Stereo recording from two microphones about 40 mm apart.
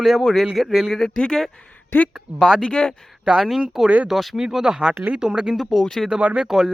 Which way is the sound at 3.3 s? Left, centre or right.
Right.